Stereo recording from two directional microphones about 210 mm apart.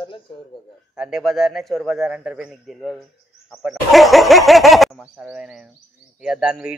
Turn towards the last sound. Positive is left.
turn(degrees=-5)  # may be behind; listen again after turning